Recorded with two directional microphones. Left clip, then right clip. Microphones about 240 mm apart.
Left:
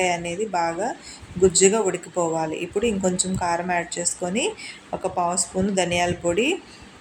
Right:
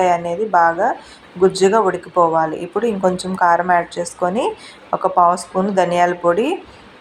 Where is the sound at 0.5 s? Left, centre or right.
Centre.